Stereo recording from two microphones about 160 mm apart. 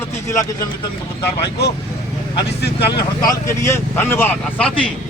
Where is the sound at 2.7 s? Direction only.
25° left (ahead or behind).